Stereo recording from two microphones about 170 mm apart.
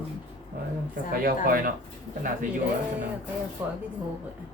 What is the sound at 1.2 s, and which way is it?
Speech, 55° right (ahead or behind).